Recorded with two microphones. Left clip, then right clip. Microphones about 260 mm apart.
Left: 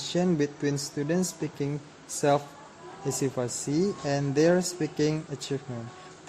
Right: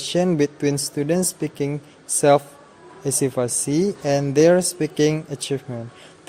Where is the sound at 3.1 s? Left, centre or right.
Right.